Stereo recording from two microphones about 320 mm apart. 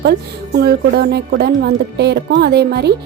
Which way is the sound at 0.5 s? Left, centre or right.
Right.